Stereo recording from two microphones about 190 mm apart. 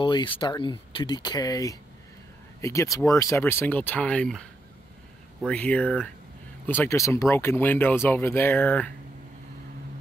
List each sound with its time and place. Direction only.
0.0 s speech: 25° left (ahead or behind); by 4.5 s 5° left (ahead or behind)
5.5 s speech: 5° left (ahead or behind)